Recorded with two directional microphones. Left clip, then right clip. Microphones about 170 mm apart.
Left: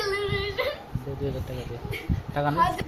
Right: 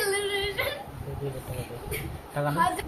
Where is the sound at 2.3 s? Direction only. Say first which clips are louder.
Left 3 dB; 80° left.